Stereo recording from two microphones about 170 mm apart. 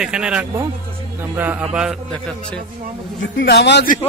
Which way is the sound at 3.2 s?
85° left.